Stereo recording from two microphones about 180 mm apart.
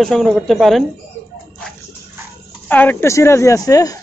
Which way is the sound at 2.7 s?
10° left (ahead or behind).